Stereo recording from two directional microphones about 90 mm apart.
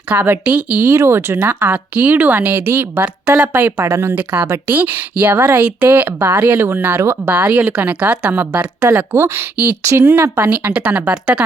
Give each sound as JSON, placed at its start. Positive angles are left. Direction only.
{"t": 0.1, "sound": "a woman's voice", "side_deg": -20}
{"t": 4.1, "sound": "a woman's voice", "side_deg": -20}